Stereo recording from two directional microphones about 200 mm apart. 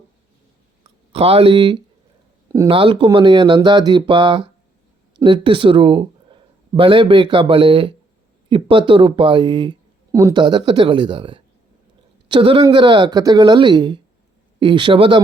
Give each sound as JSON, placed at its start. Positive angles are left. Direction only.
{"t": 1.1, "sound": "speech", "side_deg": -30}